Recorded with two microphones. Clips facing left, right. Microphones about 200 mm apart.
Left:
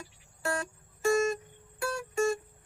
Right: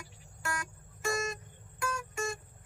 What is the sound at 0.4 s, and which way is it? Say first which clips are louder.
Music: left 6 dB; 30° left (ahead or behind).